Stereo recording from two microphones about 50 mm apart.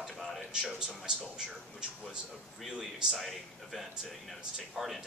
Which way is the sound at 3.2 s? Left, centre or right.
Centre.